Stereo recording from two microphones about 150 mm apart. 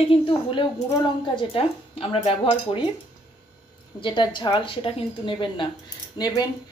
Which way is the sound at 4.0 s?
30° left (ahead or behind).